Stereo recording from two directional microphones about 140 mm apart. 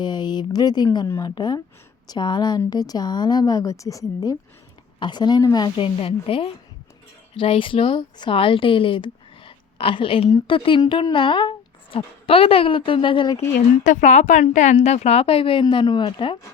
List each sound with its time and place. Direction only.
0.0 s speech: 30° left (ahead or behind)
1.0 s a woman's voice: 20° left (ahead or behind)
1.4 s a woman's voice: 30° left (ahead or behind)
13.8 s a woman's voice: 60° left (ahead or behind); by 16.4 s 35° left (ahead or behind)